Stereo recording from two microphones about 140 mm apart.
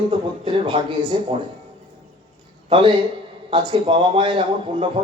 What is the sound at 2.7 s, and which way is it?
Speech, 40° right (ahead or behind).